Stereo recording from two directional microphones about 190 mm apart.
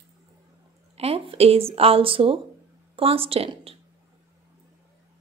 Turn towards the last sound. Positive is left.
turn(degrees=-30)  # may be behind; listen again after turning